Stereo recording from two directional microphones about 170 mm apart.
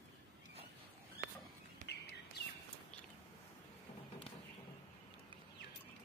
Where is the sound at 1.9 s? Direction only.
80° left.